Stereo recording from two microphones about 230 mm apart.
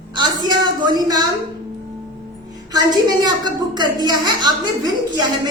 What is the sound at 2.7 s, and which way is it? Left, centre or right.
A woman's voice, centre.